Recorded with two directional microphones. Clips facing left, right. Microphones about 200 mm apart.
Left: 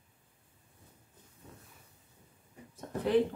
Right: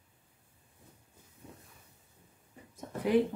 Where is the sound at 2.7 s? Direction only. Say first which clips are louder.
Even; 10° right (ahead or behind).